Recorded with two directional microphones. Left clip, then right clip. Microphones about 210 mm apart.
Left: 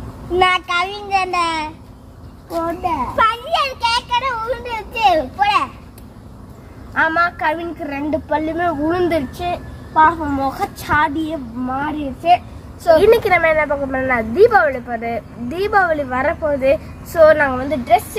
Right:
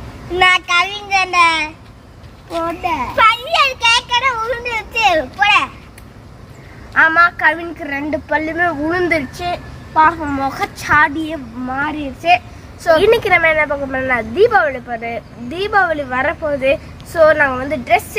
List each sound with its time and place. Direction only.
0.3 s a child's voice: 5° right (ahead or behind)
3.2 s a child's voice: 15° right (ahead or behind)
6.9 s a woman's voice: 5° left (ahead or behind)